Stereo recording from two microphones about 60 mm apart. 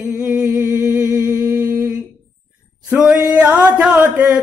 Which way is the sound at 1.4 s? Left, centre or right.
Right.